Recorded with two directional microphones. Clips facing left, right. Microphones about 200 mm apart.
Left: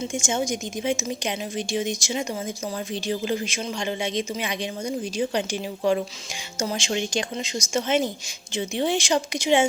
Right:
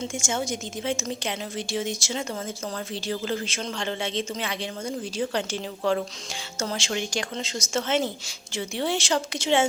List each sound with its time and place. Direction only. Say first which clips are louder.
0.0 s a woman's voice: left 3 dB; 20° left (ahead or behind)